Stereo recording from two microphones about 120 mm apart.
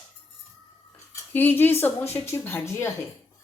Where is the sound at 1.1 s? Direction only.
15° left (ahead or behind).